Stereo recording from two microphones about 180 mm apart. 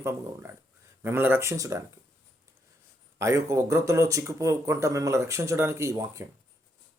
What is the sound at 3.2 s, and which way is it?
Speech, 15° right (ahead or behind).